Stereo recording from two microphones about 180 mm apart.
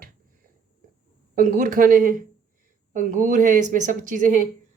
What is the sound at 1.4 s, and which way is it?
A woman's voice, 45° right (ahead or behind).